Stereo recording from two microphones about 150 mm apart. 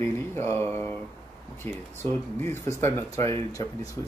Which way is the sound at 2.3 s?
15° left (ahead or behind).